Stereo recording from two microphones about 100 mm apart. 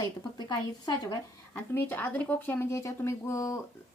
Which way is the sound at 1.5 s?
20° left (ahead or behind).